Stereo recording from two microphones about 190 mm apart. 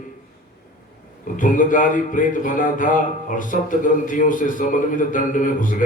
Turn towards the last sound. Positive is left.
turn(degrees=45)  # may be behind; listen again after turning